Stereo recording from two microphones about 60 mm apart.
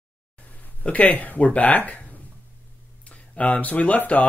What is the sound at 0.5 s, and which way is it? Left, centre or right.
Speech, left.